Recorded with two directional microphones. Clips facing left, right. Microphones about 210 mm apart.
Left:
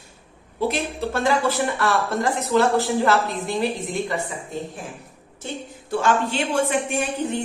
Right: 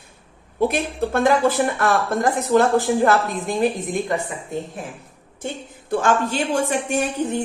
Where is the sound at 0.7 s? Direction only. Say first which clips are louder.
Right 3 dB; 55° right (ahead or behind).